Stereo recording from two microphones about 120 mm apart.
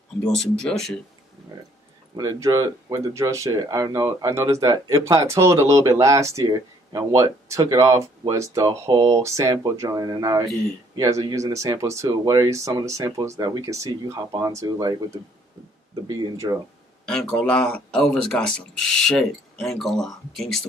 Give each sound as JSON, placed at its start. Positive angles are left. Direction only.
{"t": 0.3, "sound": "speech", "side_deg": 5}
{"t": 2.1, "sound": "speech", "side_deg": -30}
{"t": 16.1, "sound": "speech", "side_deg": -30}
{"t": 17.1, "sound": "speech", "side_deg": 10}